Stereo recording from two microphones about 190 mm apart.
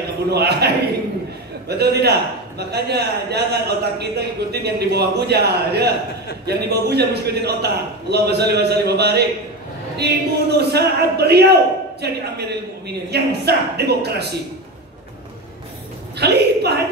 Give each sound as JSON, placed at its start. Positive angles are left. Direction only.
{"t": 0.3, "sound": "a man's voice", "side_deg": -60}
{"t": 16.2, "sound": "a woman's voice", "side_deg": -60}